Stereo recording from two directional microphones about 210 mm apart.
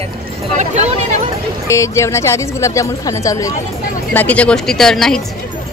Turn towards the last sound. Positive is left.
turn(degrees=0)  # may be behind; listen again after turning